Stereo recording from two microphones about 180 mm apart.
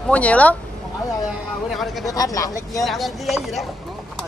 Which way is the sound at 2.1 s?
20° left (ahead or behind).